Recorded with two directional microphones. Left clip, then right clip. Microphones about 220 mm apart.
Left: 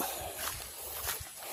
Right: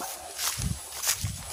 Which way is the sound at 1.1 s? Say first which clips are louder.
Right 10 dB; 35° right (ahead or behind).